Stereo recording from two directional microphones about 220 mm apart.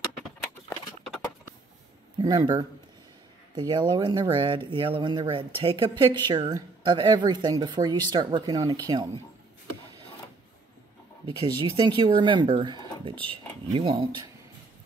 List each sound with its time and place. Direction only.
2.1 s speech: 20° right (ahead or behind)
11.2 s speech: 20° right (ahead or behind)